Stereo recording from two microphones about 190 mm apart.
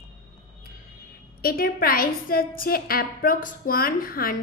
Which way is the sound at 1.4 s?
50° left (ahead or behind).